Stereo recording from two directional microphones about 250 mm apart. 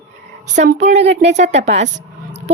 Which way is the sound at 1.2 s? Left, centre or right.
Right.